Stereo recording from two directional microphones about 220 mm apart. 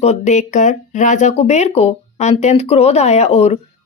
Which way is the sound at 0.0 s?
30° left (ahead or behind).